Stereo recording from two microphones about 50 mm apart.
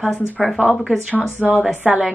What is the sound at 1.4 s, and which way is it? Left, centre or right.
Speech, centre.